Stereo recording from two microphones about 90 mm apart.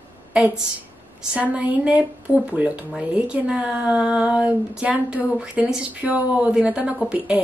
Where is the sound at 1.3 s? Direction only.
15° right (ahead or behind).